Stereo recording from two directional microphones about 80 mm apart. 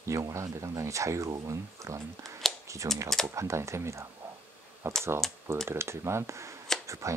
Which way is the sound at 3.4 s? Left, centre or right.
Right.